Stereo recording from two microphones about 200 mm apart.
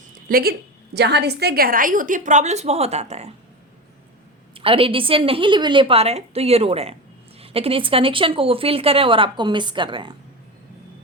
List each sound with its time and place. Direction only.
0.3 s a woman's voice: 45° right (ahead or behind)
4.5 s speech: 25° right (ahead or behind)